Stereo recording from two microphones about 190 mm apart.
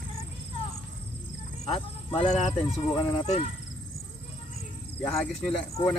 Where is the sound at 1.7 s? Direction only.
30° left (ahead or behind).